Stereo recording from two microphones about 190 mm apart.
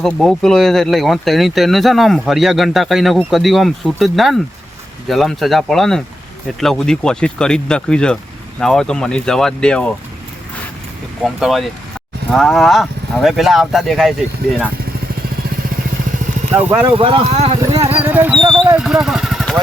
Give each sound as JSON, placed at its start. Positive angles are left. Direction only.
{"t": 0.0, "sound": "speech", "side_deg": 0}
{"t": 11.3, "sound": "speech", "side_deg": 0}
{"t": 16.6, "sound": "music", "side_deg": -10}
{"t": 17.0, "sound": "speech", "side_deg": -30}
{"t": 17.9, "sound": "music", "side_deg": -10}
{"t": 18.4, "sound": "speech", "side_deg": -25}
{"t": 18.7, "sound": "speech", "side_deg": -5}